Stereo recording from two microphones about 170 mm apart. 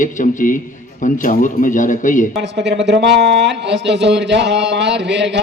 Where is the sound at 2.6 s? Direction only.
90° right.